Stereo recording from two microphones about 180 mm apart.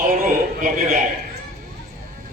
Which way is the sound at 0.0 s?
50° right (ahead or behind).